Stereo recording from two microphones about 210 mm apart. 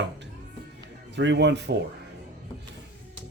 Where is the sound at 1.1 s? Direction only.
55° right (ahead or behind).